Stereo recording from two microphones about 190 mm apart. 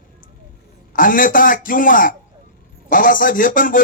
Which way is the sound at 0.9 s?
45° left (ahead or behind).